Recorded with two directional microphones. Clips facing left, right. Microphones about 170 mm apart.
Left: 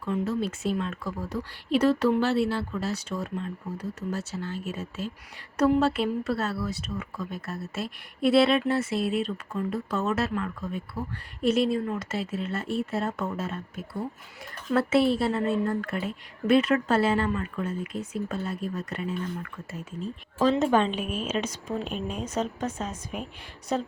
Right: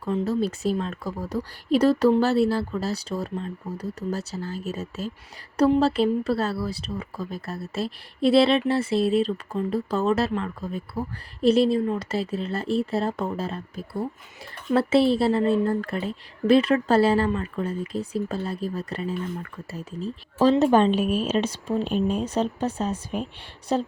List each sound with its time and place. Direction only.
0.0 s a woman's voice: 35° right (ahead or behind)